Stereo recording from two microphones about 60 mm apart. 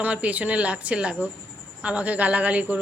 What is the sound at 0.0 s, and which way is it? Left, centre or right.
A woman's voice, right.